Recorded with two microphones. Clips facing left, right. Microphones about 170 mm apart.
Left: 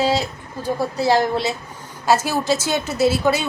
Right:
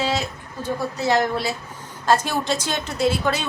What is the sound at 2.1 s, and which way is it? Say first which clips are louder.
A woman's voice: left 2 dB; 5° left (ahead or behind).